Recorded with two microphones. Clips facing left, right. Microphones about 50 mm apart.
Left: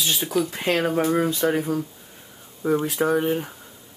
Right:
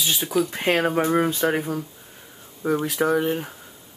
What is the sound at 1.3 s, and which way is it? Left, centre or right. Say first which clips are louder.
Speech: even; right.